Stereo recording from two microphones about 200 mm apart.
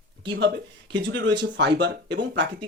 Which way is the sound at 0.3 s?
60° right (ahead or behind).